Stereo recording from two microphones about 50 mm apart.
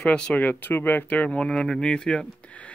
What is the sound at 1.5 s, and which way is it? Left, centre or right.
Speech, centre.